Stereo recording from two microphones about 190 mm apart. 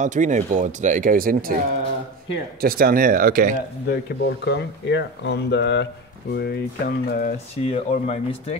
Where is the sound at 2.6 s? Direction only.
50° right (ahead or behind).